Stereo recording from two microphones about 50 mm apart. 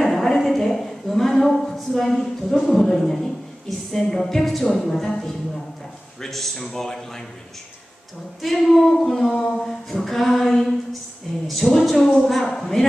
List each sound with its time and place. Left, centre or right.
0.0 s a sound: centre
2.6 s speech: centre
3.6 s a capella: centre
4.6 s speech: centre
8.4 s a capella: centre
12.4 s a man's voice: centre